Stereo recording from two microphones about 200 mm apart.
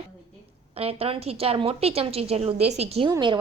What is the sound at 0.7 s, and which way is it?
A woman's voice, 30° right (ahead or behind).